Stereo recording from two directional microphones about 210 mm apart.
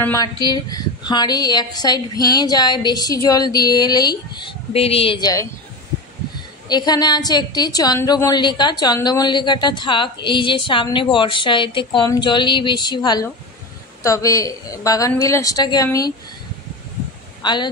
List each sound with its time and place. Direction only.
0.0 s a woman's voice: 15° left (ahead or behind)
6.7 s a woman's voice: 20° left (ahead or behind)
17.4 s a sound: 20° left (ahead or behind)